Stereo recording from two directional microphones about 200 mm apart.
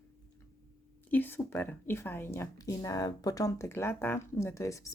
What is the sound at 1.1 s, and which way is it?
Speech, 10° left (ahead or behind).